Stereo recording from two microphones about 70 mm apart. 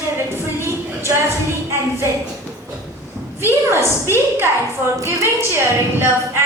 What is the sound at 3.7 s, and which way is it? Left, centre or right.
A woman's voice, right.